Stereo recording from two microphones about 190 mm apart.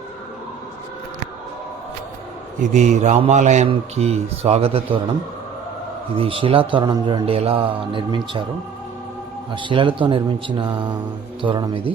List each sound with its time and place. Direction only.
2.6 s a man's voice: 40° right (ahead or behind)
6.1 s a man's voice: 30° right (ahead or behind)
9.5 s a man's voice: 25° right (ahead or behind)